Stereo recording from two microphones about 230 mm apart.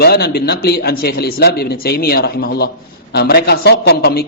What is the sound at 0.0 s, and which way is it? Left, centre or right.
A man's voice, left.